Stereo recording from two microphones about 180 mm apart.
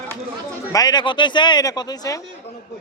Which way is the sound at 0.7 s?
20° left (ahead or behind).